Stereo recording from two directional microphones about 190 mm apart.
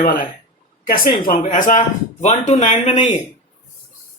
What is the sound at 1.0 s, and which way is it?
Speech, 45° left (ahead or behind).